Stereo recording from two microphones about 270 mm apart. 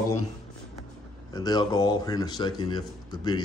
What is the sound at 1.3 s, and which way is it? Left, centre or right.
A man's voice, centre.